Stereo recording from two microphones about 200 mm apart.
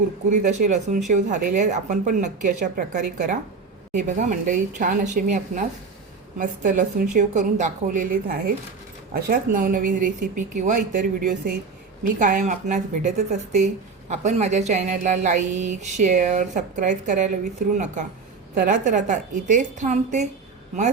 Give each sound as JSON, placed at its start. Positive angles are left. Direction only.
{"t": 0.3, "sound": "speech", "side_deg": -35}